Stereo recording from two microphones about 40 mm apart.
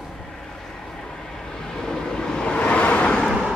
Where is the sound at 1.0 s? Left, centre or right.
Centre.